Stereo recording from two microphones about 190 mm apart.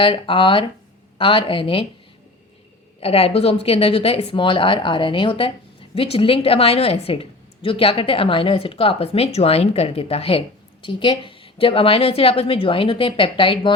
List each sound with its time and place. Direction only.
0.0 s a woman's voice: 25° left (ahead or behind)
3.0 s a woman's voice: 30° left (ahead or behind)